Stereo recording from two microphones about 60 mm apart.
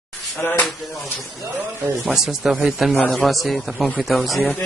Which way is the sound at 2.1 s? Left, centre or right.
Centre.